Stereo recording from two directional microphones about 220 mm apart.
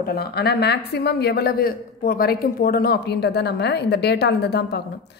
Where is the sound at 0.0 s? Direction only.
45° left (ahead or behind).